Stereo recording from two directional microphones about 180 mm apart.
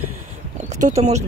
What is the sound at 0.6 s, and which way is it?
Speech, 40° right (ahead or behind).